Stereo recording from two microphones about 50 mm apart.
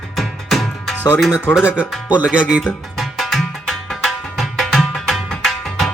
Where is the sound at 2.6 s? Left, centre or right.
Centre.